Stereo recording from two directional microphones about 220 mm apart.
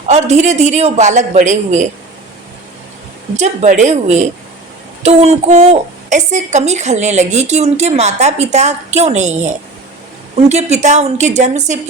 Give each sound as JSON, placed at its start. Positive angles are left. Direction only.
{"t": 0.1, "sound": "a woman's voice", "side_deg": -30}
{"t": 3.3, "sound": "a woman's voice", "side_deg": -30}